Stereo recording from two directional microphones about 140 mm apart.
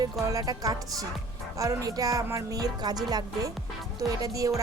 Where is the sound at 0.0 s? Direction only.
25° right (ahead or behind).